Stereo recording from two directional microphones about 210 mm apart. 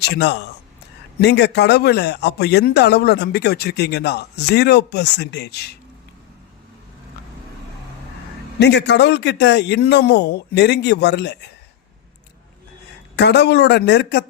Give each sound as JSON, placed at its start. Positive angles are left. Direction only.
{"t": 0.0, "sound": "a man's voice", "side_deg": 55}
{"t": 8.5, "sound": "speech", "side_deg": 55}
{"t": 13.1, "sound": "speech", "side_deg": 55}